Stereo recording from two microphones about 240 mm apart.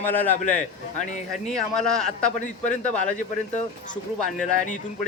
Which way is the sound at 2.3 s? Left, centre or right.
Left.